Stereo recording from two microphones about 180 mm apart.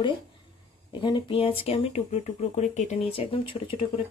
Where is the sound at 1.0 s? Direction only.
25° left (ahead or behind).